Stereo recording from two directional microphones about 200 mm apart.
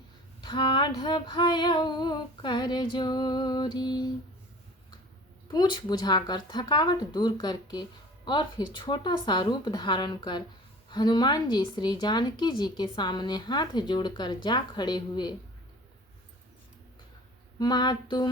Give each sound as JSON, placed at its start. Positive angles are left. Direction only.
{"t": 0.4, "sound": "a woman's voice", "side_deg": 25}
{"t": 5.5, "sound": "a woman's voice", "side_deg": 20}
{"t": 17.6, "sound": "a woman's voice", "side_deg": 20}